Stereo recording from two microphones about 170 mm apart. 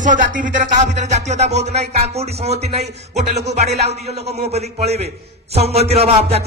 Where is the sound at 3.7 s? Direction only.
75° right (ahead or behind).